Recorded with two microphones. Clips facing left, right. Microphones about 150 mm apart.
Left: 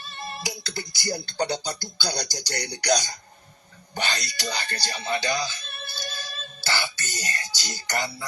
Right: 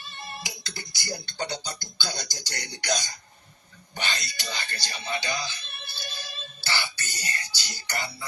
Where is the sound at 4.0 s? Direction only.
40° left (ahead or behind).